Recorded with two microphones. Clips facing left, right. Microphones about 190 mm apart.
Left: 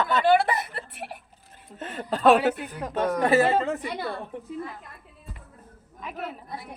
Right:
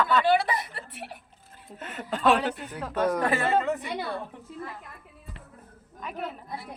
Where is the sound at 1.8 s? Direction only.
30° left (ahead or behind).